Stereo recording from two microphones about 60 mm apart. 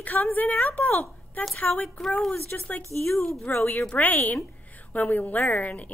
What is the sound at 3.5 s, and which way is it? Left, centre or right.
A woman's voice, left.